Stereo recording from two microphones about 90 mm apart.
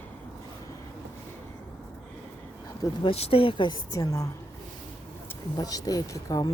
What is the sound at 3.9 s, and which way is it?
Speech, 40° left (ahead or behind).